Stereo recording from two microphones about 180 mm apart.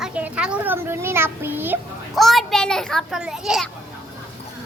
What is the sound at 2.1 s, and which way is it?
A child's voice, centre (ahead or behind).